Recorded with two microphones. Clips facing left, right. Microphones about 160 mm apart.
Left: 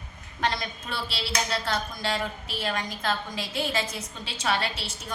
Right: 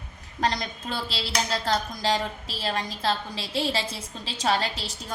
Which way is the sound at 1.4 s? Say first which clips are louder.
Right 3 dB; 35° right (ahead or behind).